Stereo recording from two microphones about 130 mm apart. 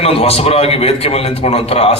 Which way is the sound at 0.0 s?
50° left (ahead or behind).